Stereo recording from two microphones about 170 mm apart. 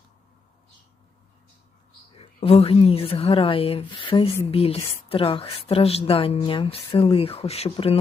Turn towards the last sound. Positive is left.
turn(degrees=35)  # may be behind; listen again after turning